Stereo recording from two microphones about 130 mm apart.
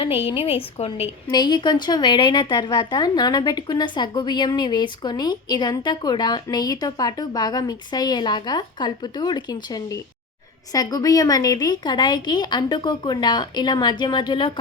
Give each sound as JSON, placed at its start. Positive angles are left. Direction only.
{"t": 0.0, "sound": "a woman's voice", "side_deg": 45}
{"t": 1.3, "sound": "a woman's voice", "side_deg": 35}